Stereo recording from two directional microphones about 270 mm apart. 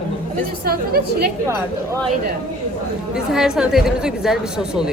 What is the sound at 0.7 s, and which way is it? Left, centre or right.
Speech, right.